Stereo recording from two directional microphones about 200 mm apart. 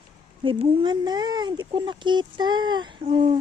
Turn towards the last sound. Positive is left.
turn(degrees=-25)  # may be behind; listen again after turning